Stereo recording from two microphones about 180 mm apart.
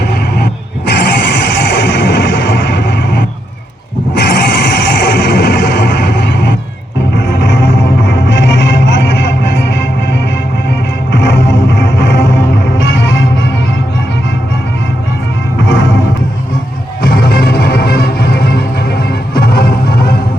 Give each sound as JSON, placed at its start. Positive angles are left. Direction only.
{"t": 0.1, "sound": "music", "side_deg": 65}
{"t": 15.6, "sound": "music", "side_deg": 90}
{"t": 17.0, "sound": "music", "side_deg": 55}